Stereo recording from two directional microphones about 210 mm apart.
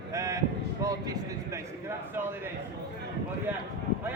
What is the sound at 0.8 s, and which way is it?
A man's voice, 15° right (ahead or behind).